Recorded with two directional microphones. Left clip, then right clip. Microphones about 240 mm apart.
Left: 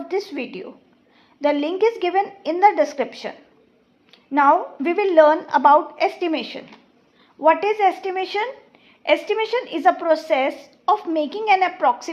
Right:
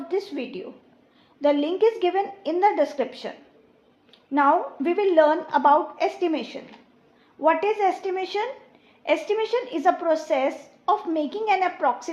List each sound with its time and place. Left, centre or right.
0.1 s speech: left